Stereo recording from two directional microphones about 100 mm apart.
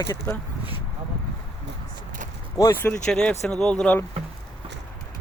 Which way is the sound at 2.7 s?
20° left (ahead or behind).